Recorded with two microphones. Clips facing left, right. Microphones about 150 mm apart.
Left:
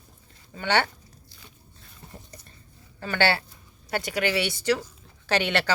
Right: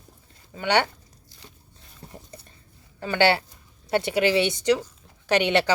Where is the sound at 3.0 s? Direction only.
15° right (ahead or behind).